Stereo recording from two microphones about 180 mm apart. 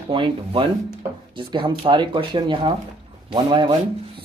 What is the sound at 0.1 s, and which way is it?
Speech, 30° right (ahead or behind).